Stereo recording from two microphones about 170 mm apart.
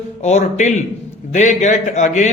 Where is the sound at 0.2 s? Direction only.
40° left (ahead or behind).